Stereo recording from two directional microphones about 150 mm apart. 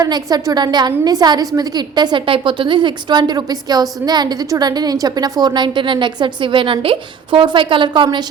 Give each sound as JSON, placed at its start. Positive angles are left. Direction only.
{"t": 0.0, "sound": "a woman's voice", "side_deg": -25}